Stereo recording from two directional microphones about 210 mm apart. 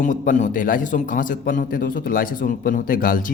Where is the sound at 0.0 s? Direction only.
35° left (ahead or behind).